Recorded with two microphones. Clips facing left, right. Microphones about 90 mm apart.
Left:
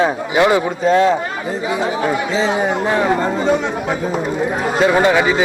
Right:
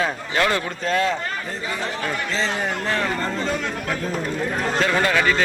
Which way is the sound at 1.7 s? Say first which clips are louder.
Left 9 dB; 10° left (ahead or behind).